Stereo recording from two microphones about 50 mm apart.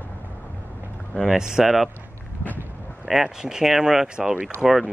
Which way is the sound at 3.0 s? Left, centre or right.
Centre.